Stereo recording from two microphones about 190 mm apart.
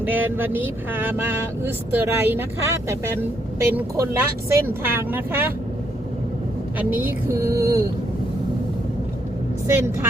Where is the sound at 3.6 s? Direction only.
15° right (ahead or behind).